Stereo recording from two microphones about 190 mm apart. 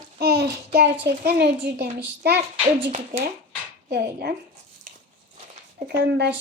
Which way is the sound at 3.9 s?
60° right (ahead or behind).